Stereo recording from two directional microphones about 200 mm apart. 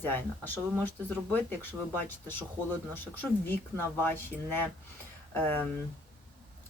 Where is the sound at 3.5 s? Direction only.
10° left (ahead or behind).